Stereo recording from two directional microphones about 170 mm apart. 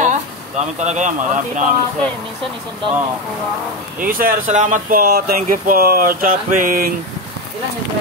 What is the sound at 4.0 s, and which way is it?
Speech, 55° right (ahead or behind).